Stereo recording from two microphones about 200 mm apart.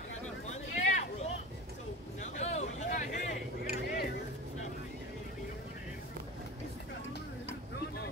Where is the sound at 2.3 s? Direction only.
35° left (ahead or behind).